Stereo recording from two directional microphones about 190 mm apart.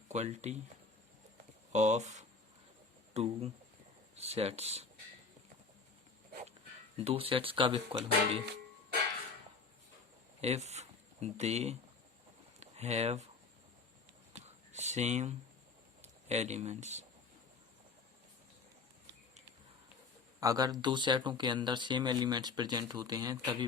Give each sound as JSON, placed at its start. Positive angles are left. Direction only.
{"t": 0.1, "sound": "speech", "side_deg": -35}
{"t": 1.7, "sound": "speech", "side_deg": -40}
{"t": 6.9, "sound": "speech", "side_deg": -30}
{"t": 10.4, "sound": "speech", "side_deg": -35}
{"t": 12.5, "sound": "a sound", "side_deg": -35}
{"t": 14.3, "sound": "a sound", "side_deg": -35}
{"t": 16.3, "sound": "speech", "side_deg": -35}
{"t": 20.4, "sound": "speech", "side_deg": -20}